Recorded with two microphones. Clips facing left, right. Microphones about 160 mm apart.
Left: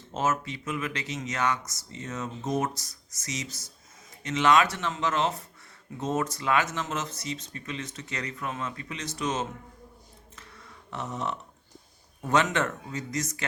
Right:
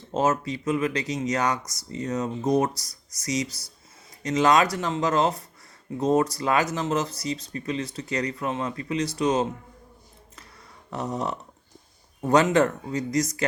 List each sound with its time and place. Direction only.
0.1 s speech: 35° right (ahead or behind)
10.9 s speech: 35° right (ahead or behind)